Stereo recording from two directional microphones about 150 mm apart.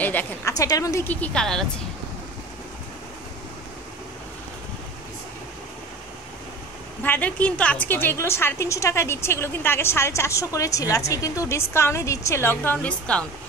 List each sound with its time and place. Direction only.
0.0 s a woman's voice: 10° left (ahead or behind)
0.6 s a woman's voice: 25° left (ahead or behind); by 1.7 s 5° left (ahead or behind)
7.0 s a woman's voice: 10° left (ahead or behind)